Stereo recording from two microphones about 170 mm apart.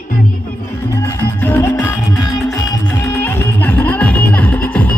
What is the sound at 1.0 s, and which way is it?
Music, 10° left (ahead or behind).